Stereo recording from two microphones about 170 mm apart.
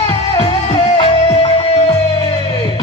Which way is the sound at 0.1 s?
30° left (ahead or behind).